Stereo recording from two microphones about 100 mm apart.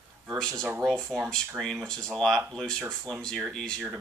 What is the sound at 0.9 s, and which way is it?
Speech, 5° left (ahead or behind).